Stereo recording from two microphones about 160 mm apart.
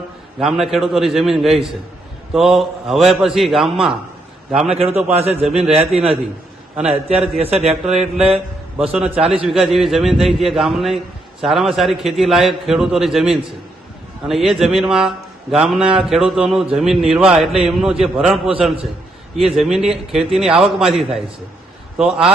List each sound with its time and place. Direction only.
0.3 s a man's voice: centre (ahead or behind)
5.1 s a man's voice: 40° right (ahead or behind)
5.5 s a man's voice: 5° right (ahead or behind)
6.7 s a man's voice: 5° right (ahead or behind)
7.3 s a man's voice: 40° right (ahead or behind)
7.9 s a man's voice: 5° right (ahead or behind)